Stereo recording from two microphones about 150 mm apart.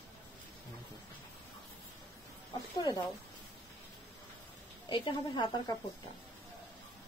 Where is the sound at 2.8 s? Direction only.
25° left (ahead or behind).